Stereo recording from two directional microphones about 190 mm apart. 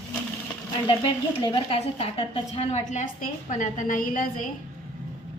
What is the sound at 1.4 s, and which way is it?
A woman's voice, 25° left (ahead or behind).